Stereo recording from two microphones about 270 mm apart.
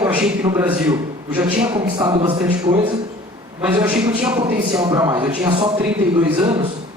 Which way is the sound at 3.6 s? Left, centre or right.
Centre.